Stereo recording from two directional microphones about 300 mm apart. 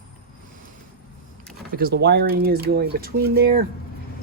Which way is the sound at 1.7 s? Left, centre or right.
Right.